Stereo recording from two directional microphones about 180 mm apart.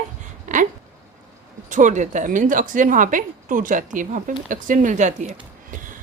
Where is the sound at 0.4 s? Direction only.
45° right (ahead or behind).